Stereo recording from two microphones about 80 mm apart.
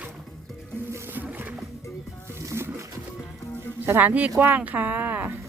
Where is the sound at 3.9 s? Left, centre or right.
Right.